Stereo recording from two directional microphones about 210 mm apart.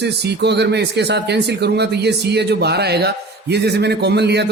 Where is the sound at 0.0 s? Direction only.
55° right (ahead or behind).